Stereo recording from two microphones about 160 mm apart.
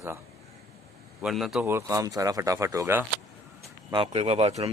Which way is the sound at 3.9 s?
35° right (ahead or behind).